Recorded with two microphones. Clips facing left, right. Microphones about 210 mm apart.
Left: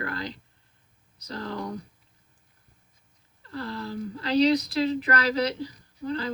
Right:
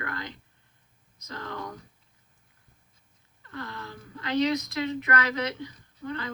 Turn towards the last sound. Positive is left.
turn(degrees=35)  # may be behind; listen again after turning